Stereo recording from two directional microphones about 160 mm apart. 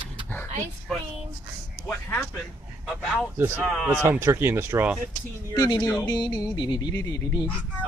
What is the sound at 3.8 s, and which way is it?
Speech, 10° right (ahead or behind).